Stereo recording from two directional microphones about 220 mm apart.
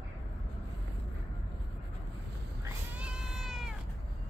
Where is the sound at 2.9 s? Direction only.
5° right (ahead or behind).